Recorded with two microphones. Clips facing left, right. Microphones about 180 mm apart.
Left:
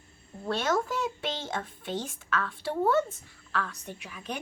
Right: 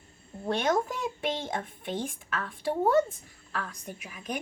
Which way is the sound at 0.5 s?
15° right (ahead or behind).